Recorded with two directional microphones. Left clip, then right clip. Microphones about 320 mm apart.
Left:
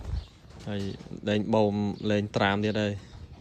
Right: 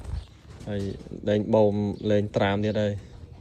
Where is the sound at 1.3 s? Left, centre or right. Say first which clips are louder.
Right 4 dB; centre.